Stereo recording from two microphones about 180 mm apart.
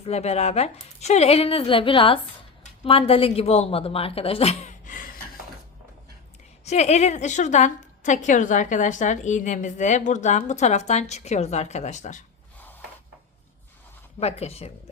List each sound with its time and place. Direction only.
0.0 s a woman's voice: 35° left (ahead or behind)
4.9 s a sound: 50° left (ahead or behind)
6.7 s a woman's voice: 40° left (ahead or behind)
14.2 s a woman's voice: 35° left (ahead or behind)